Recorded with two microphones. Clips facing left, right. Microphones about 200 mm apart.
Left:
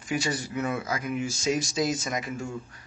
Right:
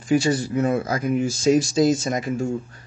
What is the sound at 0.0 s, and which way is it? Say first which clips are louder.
A man's voice: right 10 dB; 30° right (ahead or behind).